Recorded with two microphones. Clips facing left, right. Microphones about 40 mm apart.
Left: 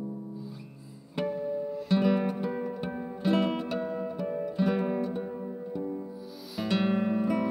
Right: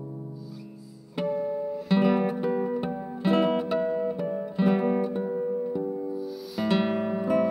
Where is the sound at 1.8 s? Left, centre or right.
Centre.